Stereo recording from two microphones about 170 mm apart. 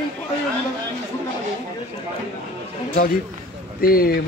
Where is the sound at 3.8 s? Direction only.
60° left (ahead or behind).